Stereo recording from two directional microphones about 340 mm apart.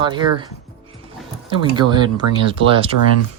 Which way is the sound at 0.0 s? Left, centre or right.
Centre.